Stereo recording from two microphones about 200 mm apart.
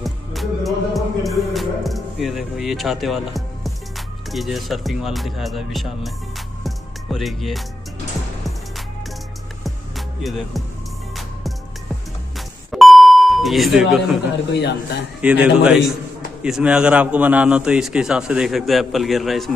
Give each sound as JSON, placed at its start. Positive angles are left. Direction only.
{"t": 0.0, "sound": "music", "side_deg": 0}
{"t": 9.6, "sound": "music", "side_deg": 0}
{"t": 12.4, "sound": "beep", "side_deg": 0}
{"t": 14.5, "sound": "a man's voice", "side_deg": 60}
{"t": 15.2, "sound": "a man's voice", "side_deg": -5}